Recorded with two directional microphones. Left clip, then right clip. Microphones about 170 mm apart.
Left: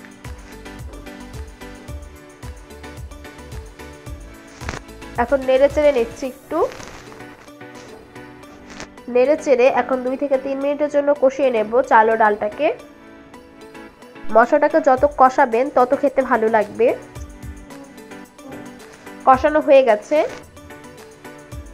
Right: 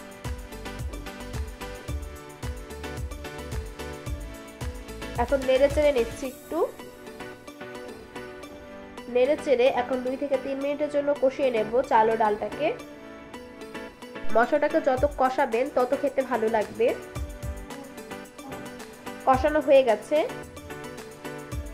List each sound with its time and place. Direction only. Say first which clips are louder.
5.3 s speech: left 6 dB; 15° left (ahead or behind)
9.1 s a woman's voice: left 7 dB; 25° left (ahead or behind)
14.3 s a woman's voice: left 8 dB; 20° left (ahead or behind)
19.2 s speech: left 8 dB; 15° left (ahead or behind)